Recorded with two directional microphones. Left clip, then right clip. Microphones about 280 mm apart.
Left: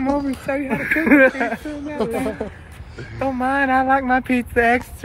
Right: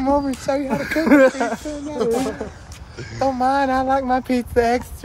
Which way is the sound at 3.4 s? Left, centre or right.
Centre.